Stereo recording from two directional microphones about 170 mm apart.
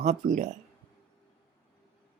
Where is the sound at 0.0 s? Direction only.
45° right (ahead or behind).